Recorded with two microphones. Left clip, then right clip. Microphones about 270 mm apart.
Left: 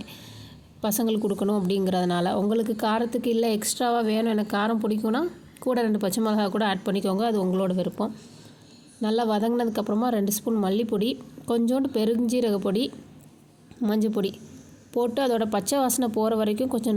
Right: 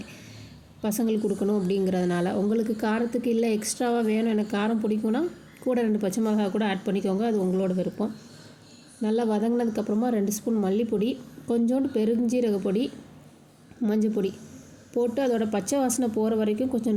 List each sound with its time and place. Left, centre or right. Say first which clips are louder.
0.8 s a woman's voice: left 1 dB; centre
13.8 s speech: even; centre